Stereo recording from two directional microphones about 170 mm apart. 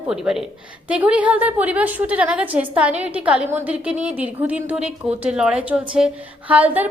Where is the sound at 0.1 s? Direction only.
5° right (ahead or behind).